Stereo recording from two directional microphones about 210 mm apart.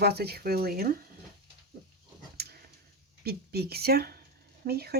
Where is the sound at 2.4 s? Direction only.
50° right (ahead or behind).